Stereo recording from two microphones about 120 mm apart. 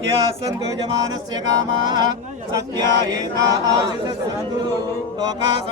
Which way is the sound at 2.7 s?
30° right (ahead or behind).